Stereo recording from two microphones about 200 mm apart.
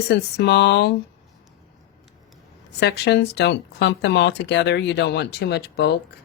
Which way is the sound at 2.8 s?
55° left (ahead or behind).